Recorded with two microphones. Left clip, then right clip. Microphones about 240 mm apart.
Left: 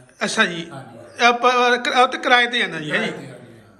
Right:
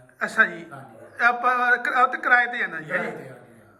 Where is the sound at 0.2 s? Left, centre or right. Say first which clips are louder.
Left 1 dB; centre.